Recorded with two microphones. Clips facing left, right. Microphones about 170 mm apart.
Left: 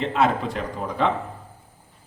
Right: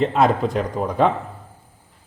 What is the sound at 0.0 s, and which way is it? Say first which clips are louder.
A man's voice: right 4 dB; 40° right (ahead or behind).